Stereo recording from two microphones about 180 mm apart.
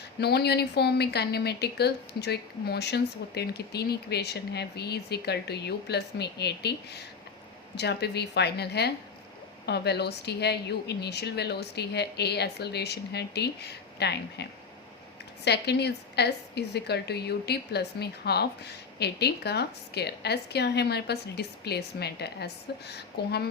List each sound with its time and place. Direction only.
0.2 s a woman's voice: 65° left (ahead or behind)
15.4 s a woman's voice: 70° left (ahead or behind)